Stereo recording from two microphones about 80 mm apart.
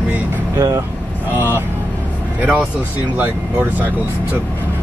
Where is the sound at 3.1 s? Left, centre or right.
Right.